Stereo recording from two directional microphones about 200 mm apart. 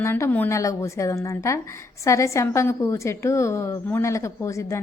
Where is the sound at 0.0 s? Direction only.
10° left (ahead or behind).